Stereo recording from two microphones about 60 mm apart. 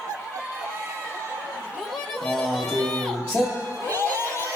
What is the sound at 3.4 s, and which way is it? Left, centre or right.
Speech, centre.